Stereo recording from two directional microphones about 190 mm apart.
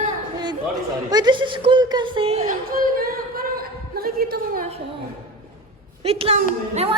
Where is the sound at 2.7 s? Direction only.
50° right (ahead or behind).